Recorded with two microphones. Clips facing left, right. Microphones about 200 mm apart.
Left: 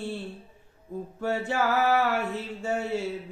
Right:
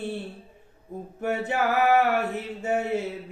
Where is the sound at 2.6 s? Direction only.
20° right (ahead or behind).